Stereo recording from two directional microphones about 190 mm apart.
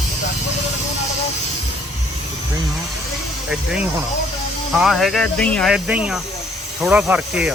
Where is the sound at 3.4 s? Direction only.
5° right (ahead or behind).